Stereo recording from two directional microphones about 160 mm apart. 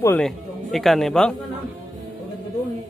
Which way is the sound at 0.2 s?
Centre (ahead or behind).